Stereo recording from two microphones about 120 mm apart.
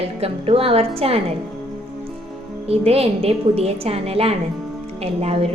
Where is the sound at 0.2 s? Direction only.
50° right (ahead or behind).